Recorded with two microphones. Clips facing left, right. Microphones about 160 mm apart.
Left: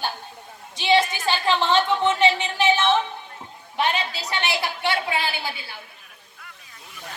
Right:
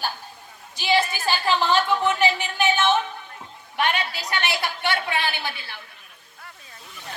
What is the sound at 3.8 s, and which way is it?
A woman's voice, 30° left (ahead or behind).